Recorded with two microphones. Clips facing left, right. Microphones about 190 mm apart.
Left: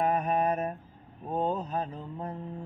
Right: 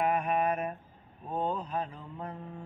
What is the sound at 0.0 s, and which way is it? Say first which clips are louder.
Mantra: left 2 dB; 40° left (ahead or behind).